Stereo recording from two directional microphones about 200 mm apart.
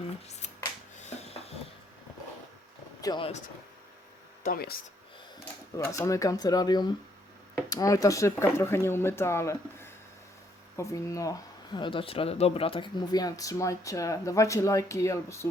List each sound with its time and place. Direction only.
0.3 s finger snapping: 35° left (ahead or behind)
1.0 s a sound: 30° left (ahead or behind)
3.0 s speech: 25° left (ahead or behind)
4.4 s speech: 50° left (ahead or behind)
5.7 s speech: 15° left (ahead or behind)